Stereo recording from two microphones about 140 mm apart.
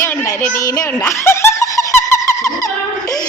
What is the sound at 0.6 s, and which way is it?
Giggle, 25° left (ahead or behind).